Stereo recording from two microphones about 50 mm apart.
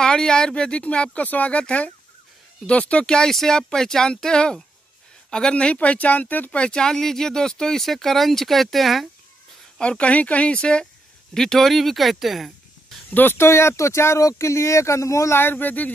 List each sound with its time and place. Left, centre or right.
0.0 s speech: centre; by 6.5 s left
6.5 s speech: centre
9.8 s speech: left
11.3 s speech: centre
13.1 s speech: left
13.4 s speech: left
15.3 s speech: left